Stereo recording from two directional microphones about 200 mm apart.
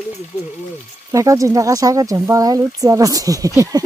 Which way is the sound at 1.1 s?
15° right (ahead or behind).